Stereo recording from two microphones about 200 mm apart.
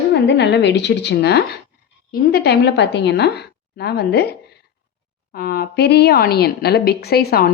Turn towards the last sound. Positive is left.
turn(degrees=50)  # may be behind; listen again after turning